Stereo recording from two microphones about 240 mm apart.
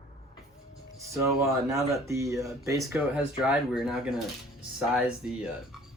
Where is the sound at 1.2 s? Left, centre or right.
Centre.